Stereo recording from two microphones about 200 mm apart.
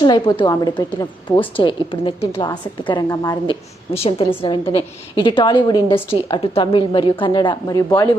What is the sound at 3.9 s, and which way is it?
A woman's voice, 30° left (ahead or behind).